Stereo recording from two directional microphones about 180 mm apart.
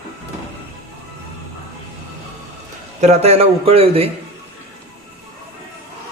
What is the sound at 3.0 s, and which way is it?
A man's voice, 35° right (ahead or behind).